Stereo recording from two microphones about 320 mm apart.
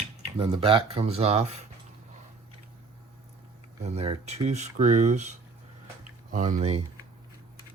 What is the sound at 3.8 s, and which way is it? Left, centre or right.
Speech, centre.